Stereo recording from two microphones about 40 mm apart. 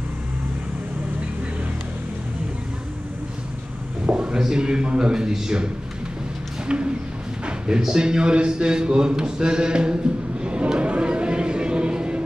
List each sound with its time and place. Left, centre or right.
4.0 s a man's voice: right
6.7 s speech: right
10.4 s a sound: right